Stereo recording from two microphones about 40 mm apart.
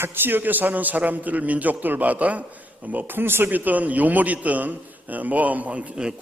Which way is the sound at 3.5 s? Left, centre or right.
Right.